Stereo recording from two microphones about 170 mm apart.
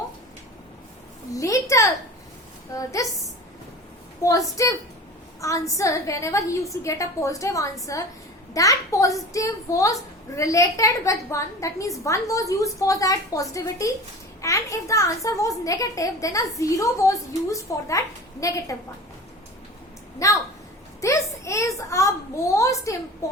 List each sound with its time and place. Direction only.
1.3 s a sound: 20° left (ahead or behind)
2.7 s a woman's voice: 20° left (ahead or behind)
4.2 s a woman's voice: 20° left (ahead or behind)
20.2 s a woman's voice: 20° left (ahead or behind)
21.0 s a sound: 20° left (ahead or behind)
22.5 s a woman's voice: 20° left (ahead or behind)